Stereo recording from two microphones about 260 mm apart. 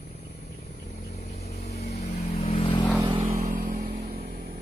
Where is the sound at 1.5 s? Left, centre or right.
Left.